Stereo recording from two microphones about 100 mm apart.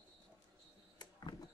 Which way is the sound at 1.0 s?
45° left (ahead or behind).